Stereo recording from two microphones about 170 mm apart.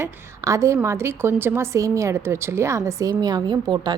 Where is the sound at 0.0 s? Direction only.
20° right (ahead or behind).